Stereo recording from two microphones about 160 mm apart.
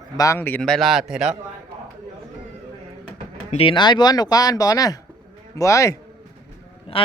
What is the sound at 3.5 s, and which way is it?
Speech, 35° left (ahead or behind).